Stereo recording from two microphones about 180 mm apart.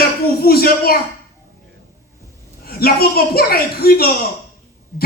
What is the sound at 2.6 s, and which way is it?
A woman's voice, 60° left (ahead or behind).